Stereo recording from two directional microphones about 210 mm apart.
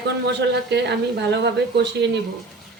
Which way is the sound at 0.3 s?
55° right (ahead or behind).